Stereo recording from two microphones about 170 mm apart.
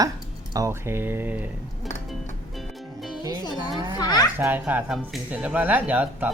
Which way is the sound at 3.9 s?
25° left (ahead or behind).